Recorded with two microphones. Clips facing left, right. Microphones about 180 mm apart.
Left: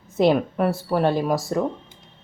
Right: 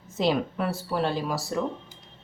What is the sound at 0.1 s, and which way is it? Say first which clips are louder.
Speech: left 6 dB; 55° left (ahead or behind).